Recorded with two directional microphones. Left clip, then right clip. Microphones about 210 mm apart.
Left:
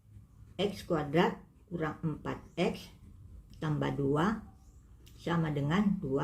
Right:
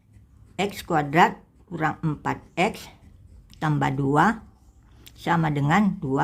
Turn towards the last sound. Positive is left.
turn(degrees=-40)  # may be behind; listen again after turning